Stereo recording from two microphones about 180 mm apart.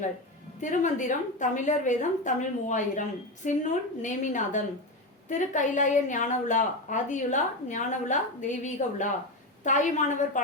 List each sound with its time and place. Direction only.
0.6 s a woman's voice: 45° left (ahead or behind)